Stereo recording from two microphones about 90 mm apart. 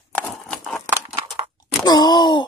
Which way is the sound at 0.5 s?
10° left (ahead or behind).